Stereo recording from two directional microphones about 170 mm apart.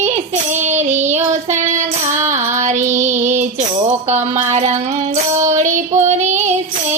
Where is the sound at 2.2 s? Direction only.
45° right (ahead or behind).